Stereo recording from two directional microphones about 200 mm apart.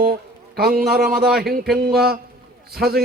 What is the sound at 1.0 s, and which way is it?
Speech, centre (ahead or behind).